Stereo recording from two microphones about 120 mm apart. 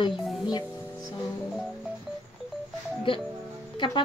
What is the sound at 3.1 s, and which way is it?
Speech, 45° left (ahead or behind).